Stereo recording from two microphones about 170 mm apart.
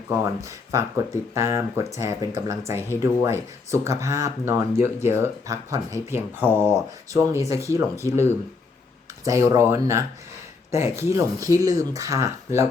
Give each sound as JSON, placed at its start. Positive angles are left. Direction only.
{"t": 0.1, "sound": "speech", "side_deg": -15}